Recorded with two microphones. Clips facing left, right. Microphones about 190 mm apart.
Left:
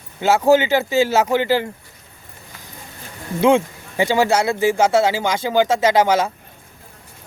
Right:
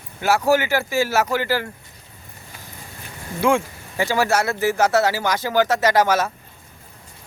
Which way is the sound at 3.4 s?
20° left (ahead or behind).